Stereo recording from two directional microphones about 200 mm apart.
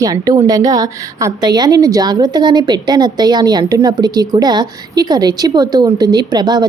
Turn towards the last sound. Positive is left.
turn(degrees=-20)  # may be behind; listen again after turning